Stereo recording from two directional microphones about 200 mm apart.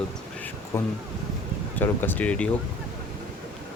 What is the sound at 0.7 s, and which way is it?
Speech, 15° left (ahead or behind).